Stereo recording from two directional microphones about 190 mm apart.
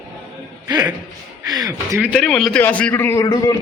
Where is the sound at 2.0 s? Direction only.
Centre (ahead or behind); by 3.5 s 20° left (ahead or behind).